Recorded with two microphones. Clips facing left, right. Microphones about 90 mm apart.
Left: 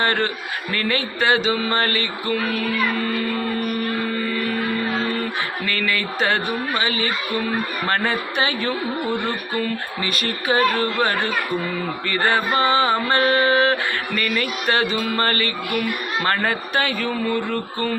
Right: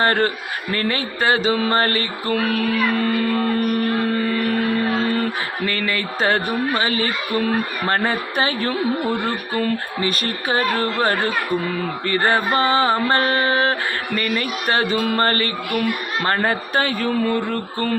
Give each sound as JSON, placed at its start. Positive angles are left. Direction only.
{"t": 0.0, "sound": "music", "side_deg": -40}
{"t": 2.3, "sound": "speech", "side_deg": -65}
{"t": 4.3, "sound": "music", "side_deg": -50}
{"t": 5.6, "sound": "music", "side_deg": -30}
{"t": 7.9, "sound": "music", "side_deg": -35}